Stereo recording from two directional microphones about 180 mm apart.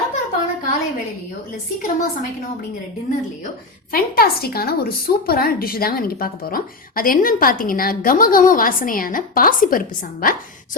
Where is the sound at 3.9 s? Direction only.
55° left (ahead or behind).